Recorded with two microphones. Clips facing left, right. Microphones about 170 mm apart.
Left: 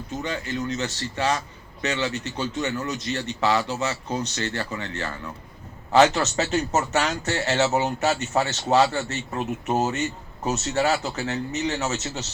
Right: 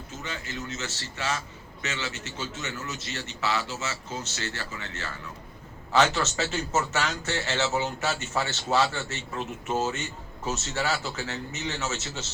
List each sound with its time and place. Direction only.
0.3 s speech: 35° left (ahead or behind)